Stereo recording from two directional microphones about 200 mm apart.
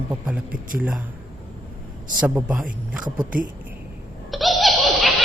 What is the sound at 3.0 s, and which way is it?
Speech, 40° right (ahead or behind).